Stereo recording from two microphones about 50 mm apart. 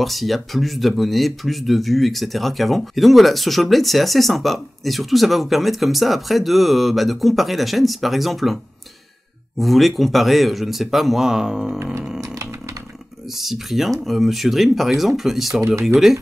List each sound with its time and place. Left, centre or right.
0.0 s speech: centre
9.6 s speech: centre
12.2 s chainsaw: right
13.3 s speech: centre